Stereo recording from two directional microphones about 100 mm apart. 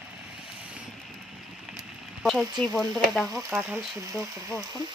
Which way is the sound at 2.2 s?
Centre (ahead or behind).